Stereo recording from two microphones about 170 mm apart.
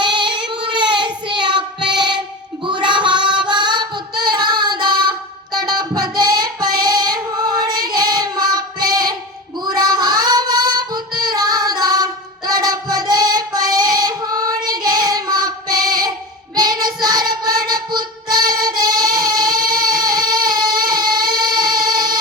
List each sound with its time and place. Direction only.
0.0 s child singing: 30° right (ahead or behind)
1.9 s music: 25° right (ahead or behind)
2.6 s a sound: 30° right (ahead or behind)
3.4 s child singing: 25° right (ahead or behind)
5.5 s singing: 25° right (ahead or behind)
9.6 s child singing: 25° right (ahead or behind)